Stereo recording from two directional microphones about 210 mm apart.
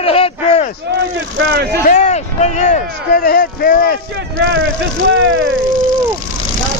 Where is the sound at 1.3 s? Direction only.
50° right (ahead or behind).